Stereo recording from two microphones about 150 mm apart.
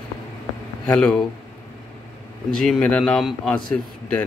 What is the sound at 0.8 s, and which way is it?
Speech, 5° left (ahead or behind).